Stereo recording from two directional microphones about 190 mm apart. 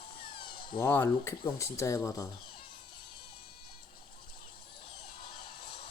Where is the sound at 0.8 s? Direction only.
10° left (ahead or behind).